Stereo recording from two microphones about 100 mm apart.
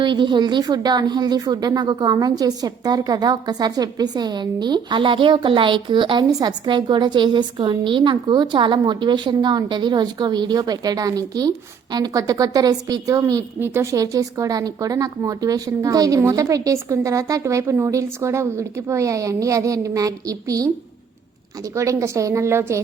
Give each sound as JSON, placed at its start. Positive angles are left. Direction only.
{"t": 0.0, "sound": "a woman's voice", "side_deg": -50}
{"t": 21.8, "sound": "a woman's voice", "side_deg": -30}